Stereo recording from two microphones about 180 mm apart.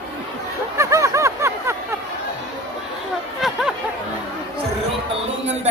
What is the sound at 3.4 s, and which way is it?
Chatter, centre (ahead or behind).